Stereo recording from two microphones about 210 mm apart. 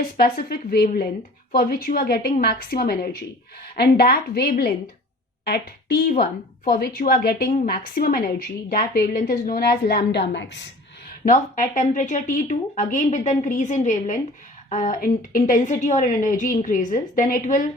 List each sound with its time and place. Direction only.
0.2 s a woman's voice: 45° left (ahead or behind)
11.3 s a woman's voice: 40° left (ahead or behind)